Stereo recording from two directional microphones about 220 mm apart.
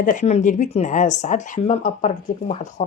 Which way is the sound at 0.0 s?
35° left (ahead or behind).